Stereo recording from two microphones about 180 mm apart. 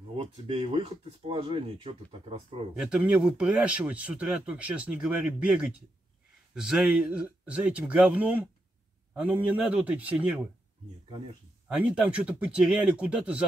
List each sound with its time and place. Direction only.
0.1 s speech: 35° right (ahead or behind)
2.8 s speech: 5° right (ahead or behind)
11.7 s speech: 5° right (ahead or behind)